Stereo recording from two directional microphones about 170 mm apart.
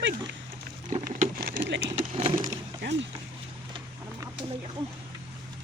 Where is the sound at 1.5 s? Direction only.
90° right.